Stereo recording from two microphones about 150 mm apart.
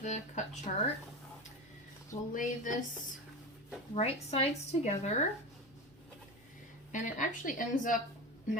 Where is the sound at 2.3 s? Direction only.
60° left (ahead or behind).